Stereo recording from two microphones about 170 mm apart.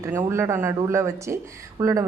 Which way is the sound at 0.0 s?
15° right (ahead or behind).